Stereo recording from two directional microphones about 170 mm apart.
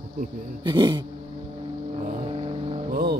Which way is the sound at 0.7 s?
25° right (ahead or behind).